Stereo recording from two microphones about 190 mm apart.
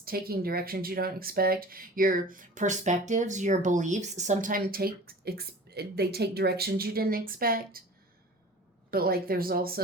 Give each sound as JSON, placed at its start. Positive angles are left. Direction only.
{"t": 0.0, "sound": "speech", "side_deg": -50}
{"t": 8.9, "sound": "speech", "side_deg": -55}